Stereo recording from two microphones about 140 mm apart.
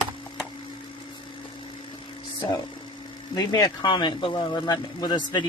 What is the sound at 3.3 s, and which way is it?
Speech, 30° left (ahead or behind).